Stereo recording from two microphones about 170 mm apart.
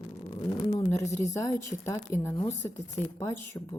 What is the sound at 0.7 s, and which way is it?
Speech, 15° left (ahead or behind).